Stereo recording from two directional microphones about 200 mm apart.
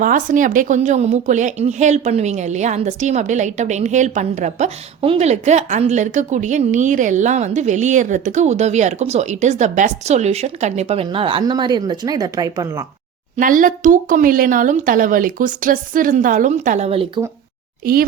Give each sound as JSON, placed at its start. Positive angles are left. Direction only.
{"t": 0.0, "sound": "a woman's voice", "side_deg": -40}
{"t": 13.3, "sound": "a woman's voice", "side_deg": -40}
{"t": 17.8, "sound": "a child's voice", "side_deg": -45}